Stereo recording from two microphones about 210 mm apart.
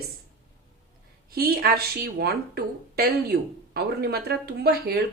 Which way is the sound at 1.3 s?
45° right (ahead or behind).